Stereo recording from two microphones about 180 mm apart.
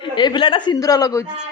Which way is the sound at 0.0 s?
25° left (ahead or behind).